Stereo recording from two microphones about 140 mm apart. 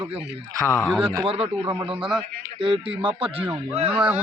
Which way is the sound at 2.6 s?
40° right (ahead or behind).